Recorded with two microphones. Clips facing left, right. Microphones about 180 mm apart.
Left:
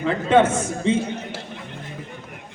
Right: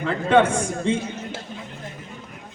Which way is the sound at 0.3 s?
5° left (ahead or behind).